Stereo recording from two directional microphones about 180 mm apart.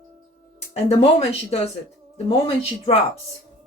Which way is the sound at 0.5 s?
35° left (ahead or behind).